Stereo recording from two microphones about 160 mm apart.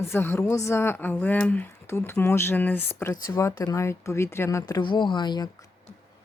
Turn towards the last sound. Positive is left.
turn(degrees=25)  # may be behind; listen again after turning